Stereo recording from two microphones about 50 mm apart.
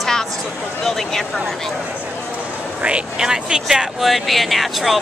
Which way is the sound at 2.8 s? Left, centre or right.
Right.